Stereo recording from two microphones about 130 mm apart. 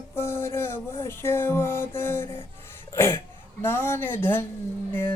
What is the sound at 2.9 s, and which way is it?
Speech, 20° left (ahead or behind).